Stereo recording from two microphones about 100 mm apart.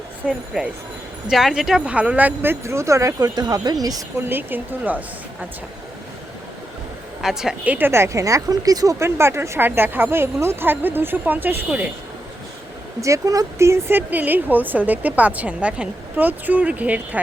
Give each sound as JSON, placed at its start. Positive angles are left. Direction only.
{"t": 0.3, "sound": "a woman's voice", "side_deg": -10}
{"t": 4.2, "sound": "speech", "side_deg": -20}
{"t": 7.2, "sound": "speech", "side_deg": -5}
{"t": 13.0, "sound": "a woman's voice", "side_deg": -35}